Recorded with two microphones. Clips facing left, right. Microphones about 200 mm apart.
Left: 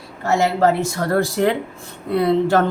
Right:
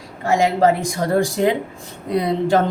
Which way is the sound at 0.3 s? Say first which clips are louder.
Right 1 dB; 15° right (ahead or behind).